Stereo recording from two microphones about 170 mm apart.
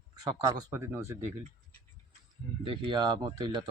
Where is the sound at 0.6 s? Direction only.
15° right (ahead or behind).